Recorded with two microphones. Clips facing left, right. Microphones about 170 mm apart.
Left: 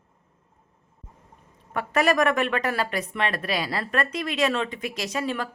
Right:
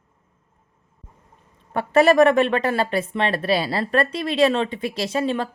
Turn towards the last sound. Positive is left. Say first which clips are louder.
# right 5 dB
turn(degrees=-30)  # may be behind; listen again after turning